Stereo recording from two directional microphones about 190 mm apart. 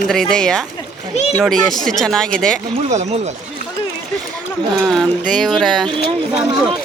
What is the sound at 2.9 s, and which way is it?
Speech, 35° right (ahead or behind).